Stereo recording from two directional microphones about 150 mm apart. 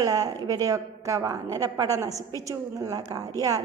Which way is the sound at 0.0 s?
25° right (ahead or behind).